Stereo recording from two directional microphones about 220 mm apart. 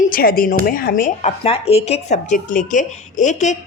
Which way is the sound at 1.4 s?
25° left (ahead or behind).